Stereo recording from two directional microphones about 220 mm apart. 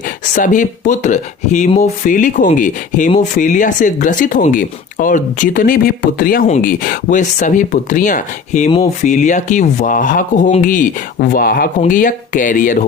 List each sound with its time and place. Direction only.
0.3 s speech: 35° left (ahead or behind)